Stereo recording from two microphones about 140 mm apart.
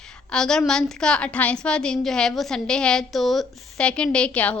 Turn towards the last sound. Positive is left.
turn(degrees=10)  # may be behind; listen again after turning